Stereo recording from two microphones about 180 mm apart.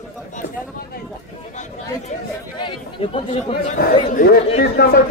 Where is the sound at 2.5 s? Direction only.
30° left (ahead or behind).